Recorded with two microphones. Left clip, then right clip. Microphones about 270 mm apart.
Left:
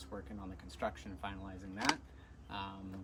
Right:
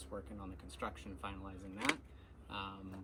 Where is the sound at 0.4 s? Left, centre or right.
Centre.